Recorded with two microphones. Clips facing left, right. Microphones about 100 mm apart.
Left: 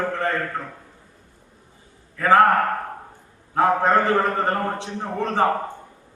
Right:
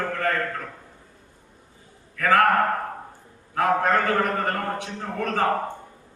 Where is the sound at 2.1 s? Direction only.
25° left (ahead or behind).